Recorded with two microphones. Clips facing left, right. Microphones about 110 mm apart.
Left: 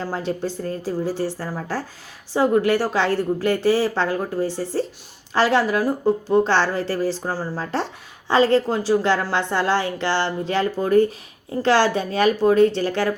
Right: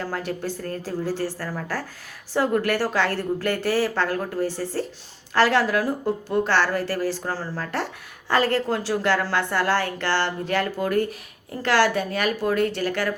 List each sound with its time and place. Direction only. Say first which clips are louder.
0.0 s a woman's voice: left 3 dB; 20° left (ahead or behind)